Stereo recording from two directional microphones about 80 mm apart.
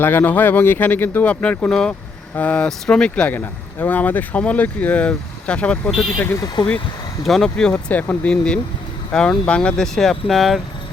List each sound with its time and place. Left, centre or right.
0.0 s speech: left
3.3 s speech: left
6.1 s speech: left
7.3 s speech: centre